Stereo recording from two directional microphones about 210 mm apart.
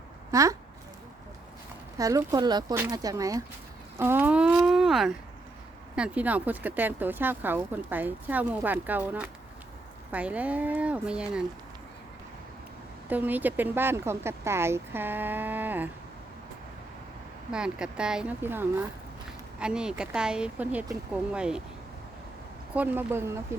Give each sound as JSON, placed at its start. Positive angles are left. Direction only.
{"t": 0.3, "sound": "speech", "side_deg": -15}
{"t": 2.0, "sound": "speech", "side_deg": -15}
{"t": 13.1, "sound": "speech", "side_deg": -10}
{"t": 17.5, "sound": "speech", "side_deg": -5}
{"t": 22.7, "sound": "speech", "side_deg": -10}